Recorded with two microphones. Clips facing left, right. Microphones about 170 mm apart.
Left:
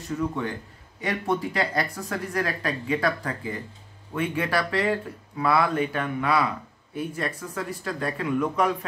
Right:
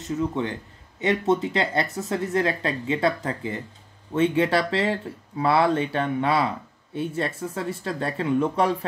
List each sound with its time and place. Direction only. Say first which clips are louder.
0.0 s speech: right 2 dB; 20° right (ahead or behind)